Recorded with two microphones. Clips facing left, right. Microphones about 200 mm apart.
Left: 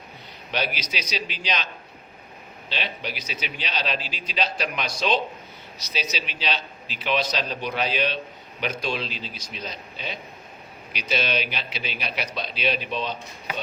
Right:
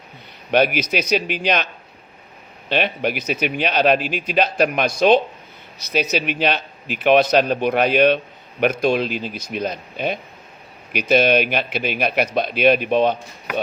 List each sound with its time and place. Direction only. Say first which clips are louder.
0.5 s speech: right 11 dB; 55° right (ahead or behind)
2.6 s a man's voice: right 11 dB; 55° right (ahead or behind)